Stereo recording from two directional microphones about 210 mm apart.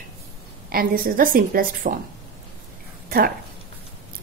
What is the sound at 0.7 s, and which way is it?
A woman's voice, 45° right (ahead or behind).